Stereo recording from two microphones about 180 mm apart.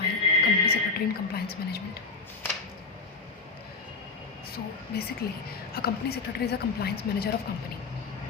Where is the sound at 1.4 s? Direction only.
60° left (ahead or behind).